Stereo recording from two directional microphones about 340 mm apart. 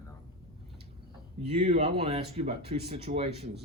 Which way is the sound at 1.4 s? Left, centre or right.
Centre.